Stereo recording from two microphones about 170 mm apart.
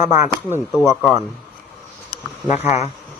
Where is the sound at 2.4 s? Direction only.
40° left (ahead or behind).